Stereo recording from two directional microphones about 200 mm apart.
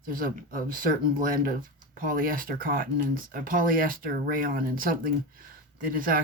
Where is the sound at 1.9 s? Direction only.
45° right (ahead or behind).